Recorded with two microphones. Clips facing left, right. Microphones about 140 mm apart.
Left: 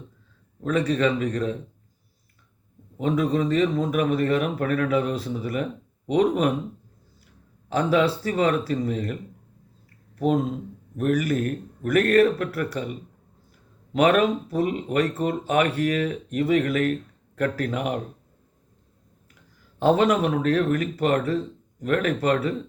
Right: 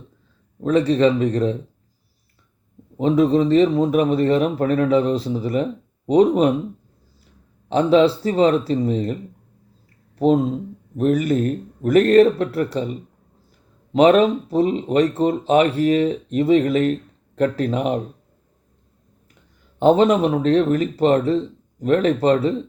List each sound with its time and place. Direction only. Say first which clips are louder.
0.6 s speech: right 6 dB; 30° right (ahead or behind)
3.0 s speech: right 7 dB; 30° right (ahead or behind)
7.7 s speech: right 6 dB; 25° right (ahead or behind)
10.2 s speech: right 6 dB; 30° right (ahead or behind)
19.8 s speech: right 5 dB; 25° right (ahead or behind)